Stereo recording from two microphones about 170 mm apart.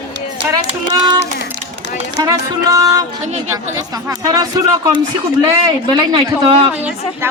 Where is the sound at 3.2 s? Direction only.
45° right (ahead or behind).